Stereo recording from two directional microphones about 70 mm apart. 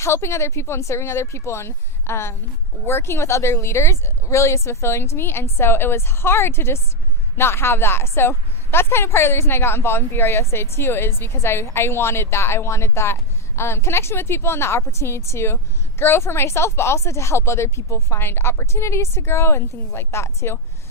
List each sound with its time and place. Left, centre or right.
0.0 s a woman's voice: left